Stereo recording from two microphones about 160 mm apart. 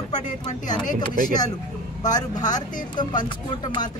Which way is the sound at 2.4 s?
25° left (ahead or behind).